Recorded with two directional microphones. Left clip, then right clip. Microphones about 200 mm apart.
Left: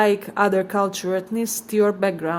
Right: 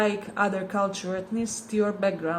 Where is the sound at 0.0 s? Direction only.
60° left (ahead or behind).